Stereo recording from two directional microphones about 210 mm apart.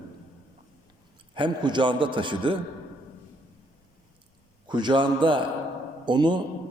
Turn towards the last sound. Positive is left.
turn(degrees=-20)  # may be behind; listen again after turning